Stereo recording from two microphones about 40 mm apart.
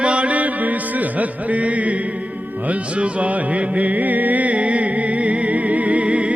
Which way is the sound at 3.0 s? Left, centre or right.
Right.